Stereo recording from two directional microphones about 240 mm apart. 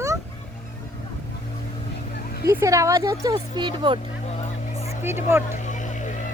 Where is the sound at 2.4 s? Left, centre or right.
Centre.